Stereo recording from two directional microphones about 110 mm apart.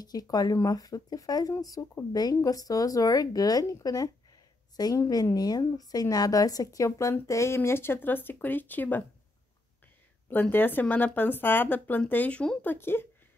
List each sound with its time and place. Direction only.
0.0 s a woman's voice: 35° left (ahead or behind); by 9.0 s 15° left (ahead or behind)
10.3 s speech: 20° left (ahead or behind)
12.7 s a woman's voice: 20° left (ahead or behind)